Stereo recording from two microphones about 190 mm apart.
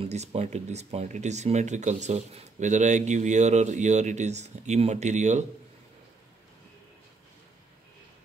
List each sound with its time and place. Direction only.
0.0 s speech: 35° right (ahead or behind)